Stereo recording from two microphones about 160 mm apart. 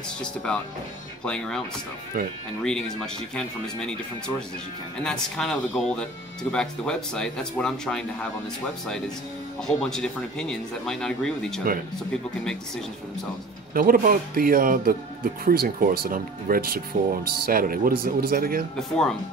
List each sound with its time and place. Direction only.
0.2 s speech: 5° left (ahead or behind)
2.1 s speech: 60° right (ahead or behind)
2.6 s speech: 5° left (ahead or behind)
5.0 s speech: 5° left (ahead or behind)
9.7 s speech: 5° left (ahead or behind)
13.7 s speech: 60° right (ahead or behind)
18.8 s speech: 5° left (ahead or behind)